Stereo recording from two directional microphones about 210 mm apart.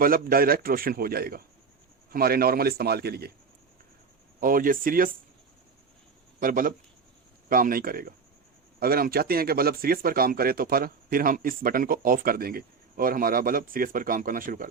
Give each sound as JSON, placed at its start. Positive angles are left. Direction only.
{"t": 0.0, "sound": "speech", "side_deg": -45}
{"t": 4.4, "sound": "speech", "side_deg": -40}
{"t": 6.4, "sound": "speech", "side_deg": -40}